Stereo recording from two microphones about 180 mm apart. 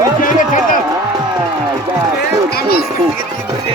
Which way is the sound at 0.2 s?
45° left (ahead or behind).